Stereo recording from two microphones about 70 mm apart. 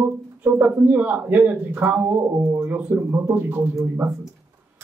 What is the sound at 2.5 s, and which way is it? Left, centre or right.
Speech, right.